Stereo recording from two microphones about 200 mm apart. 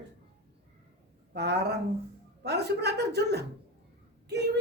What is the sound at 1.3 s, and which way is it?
Speech, 55° right (ahead or behind).